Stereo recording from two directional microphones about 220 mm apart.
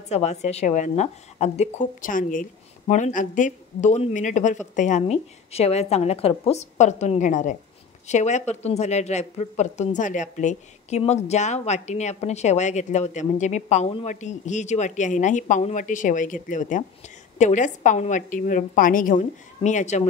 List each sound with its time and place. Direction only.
0.1 s a woman's voice: 30° left (ahead or behind)